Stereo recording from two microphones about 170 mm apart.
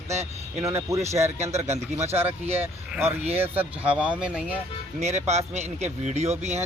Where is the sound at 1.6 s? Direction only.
40° right (ahead or behind).